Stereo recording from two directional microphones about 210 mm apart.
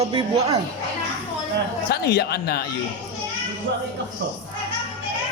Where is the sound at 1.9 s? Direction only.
50° left (ahead or behind).